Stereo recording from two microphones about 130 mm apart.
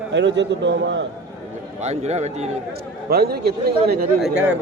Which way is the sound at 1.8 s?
55° right (ahead or behind).